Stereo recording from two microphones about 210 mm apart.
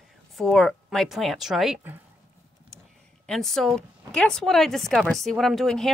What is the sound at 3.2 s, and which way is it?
Speech, centre (ahead or behind).